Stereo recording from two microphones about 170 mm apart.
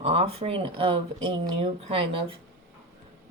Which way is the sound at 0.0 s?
35° right (ahead or behind).